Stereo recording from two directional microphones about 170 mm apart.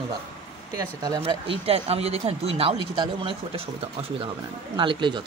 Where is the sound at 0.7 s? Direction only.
20° right (ahead or behind).